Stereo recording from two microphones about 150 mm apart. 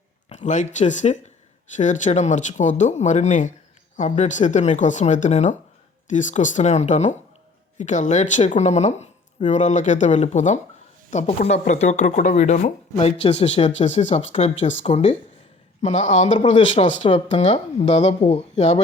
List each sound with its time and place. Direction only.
0.3 s speech: 55° left (ahead or behind)